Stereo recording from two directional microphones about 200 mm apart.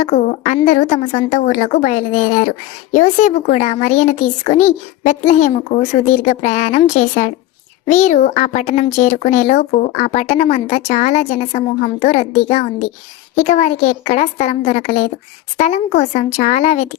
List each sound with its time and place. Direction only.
0.0 s a child's voice: 40° left (ahead or behind)
2.9 s a child's voice: 35° left (ahead or behind)